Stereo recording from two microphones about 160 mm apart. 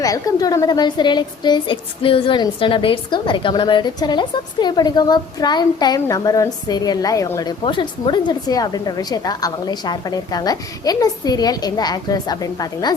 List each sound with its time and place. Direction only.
0.0 s a woman's voice: 20° left (ahead or behind)
7.6 s a woman's voice: 30° left (ahead or behind)